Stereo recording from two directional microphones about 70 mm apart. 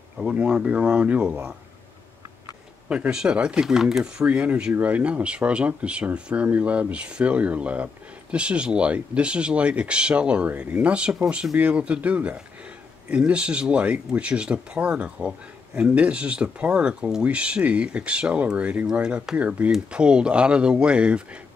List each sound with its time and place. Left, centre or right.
0.2 s speech: centre
2.9 s speech: centre